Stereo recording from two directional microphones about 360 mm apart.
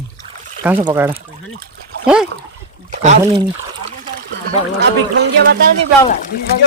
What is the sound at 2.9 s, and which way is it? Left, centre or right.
Speech, centre.